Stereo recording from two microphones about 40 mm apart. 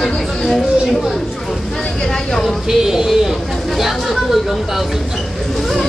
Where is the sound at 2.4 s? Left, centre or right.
Centre.